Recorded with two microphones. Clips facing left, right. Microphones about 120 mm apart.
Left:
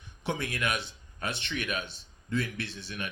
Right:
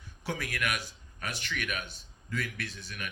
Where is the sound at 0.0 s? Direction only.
20° left (ahead or behind).